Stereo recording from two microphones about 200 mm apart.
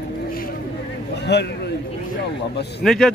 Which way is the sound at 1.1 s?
60° left (ahead or behind).